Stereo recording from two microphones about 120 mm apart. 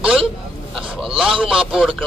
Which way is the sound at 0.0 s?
5° right (ahead or behind).